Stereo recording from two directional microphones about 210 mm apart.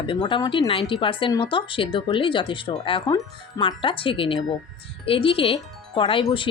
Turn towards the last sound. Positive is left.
turn(degrees=25)  # may be behind; listen again after turning